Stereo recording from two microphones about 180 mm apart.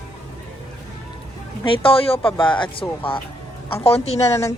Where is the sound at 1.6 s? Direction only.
30° left (ahead or behind).